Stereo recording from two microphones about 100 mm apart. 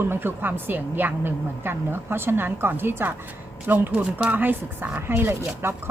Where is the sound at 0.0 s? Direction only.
20° right (ahead or behind).